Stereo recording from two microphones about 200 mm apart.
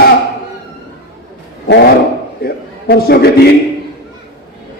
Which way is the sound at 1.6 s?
60° left (ahead or behind).